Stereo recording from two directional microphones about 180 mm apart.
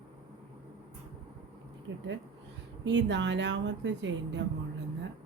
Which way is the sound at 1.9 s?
90° right.